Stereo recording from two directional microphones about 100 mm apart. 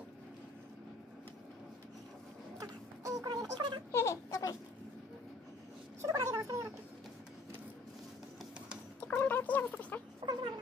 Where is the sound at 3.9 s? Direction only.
30° left (ahead or behind).